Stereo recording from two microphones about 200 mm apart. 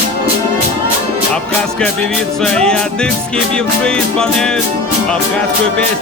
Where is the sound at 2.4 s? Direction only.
5° left (ahead or behind).